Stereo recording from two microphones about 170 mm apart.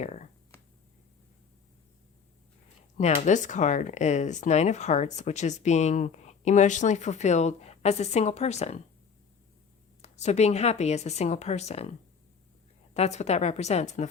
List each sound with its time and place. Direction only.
0.0 s a sound: 40° left (ahead or behind)
3.0 s speech: 45° left (ahead or behind)
10.0 s a woman's voice: 40° left (ahead or behind)